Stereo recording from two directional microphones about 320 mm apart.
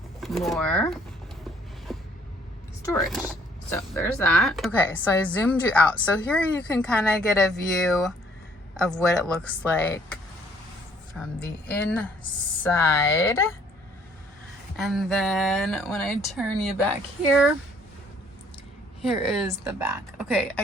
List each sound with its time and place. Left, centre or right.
0.2 s speech: centre
1.9 s a sound: centre
2.8 s speech: centre
11.4 s speech: centre
14.8 s speech: centre
19.0 s speech: centre